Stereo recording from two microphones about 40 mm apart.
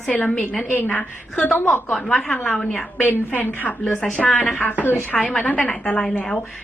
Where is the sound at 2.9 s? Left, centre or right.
Left.